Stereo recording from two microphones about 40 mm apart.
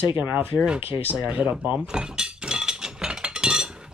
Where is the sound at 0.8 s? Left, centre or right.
Right.